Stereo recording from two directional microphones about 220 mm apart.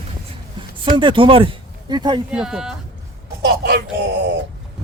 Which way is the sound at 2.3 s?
5° right (ahead or behind).